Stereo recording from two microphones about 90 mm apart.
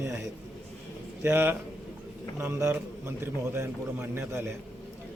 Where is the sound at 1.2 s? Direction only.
25° right (ahead or behind).